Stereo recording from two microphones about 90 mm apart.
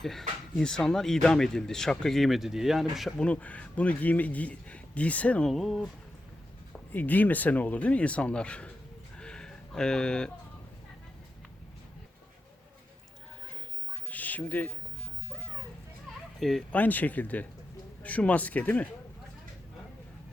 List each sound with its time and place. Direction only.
0.0 s speech: 5° left (ahead or behind)
3.2 s speech: 15° left (ahead or behind)
5.5 s speech: centre (ahead or behind)
6.9 s speech: 20° left (ahead or behind)
9.1 s a sound: 10° left (ahead or behind)
14.1 s a sound: 20° left (ahead or behind)
16.4 s speech: 5° left (ahead or behind)
16.7 s speech: 20° left (ahead or behind)